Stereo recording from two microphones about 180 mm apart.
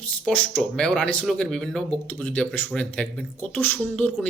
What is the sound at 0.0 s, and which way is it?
A man's voice, 5° left (ahead or behind).